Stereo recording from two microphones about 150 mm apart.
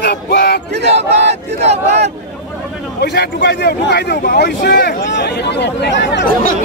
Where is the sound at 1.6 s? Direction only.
45° right (ahead or behind).